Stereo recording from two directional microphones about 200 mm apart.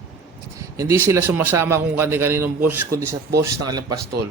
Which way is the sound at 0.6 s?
15° right (ahead or behind).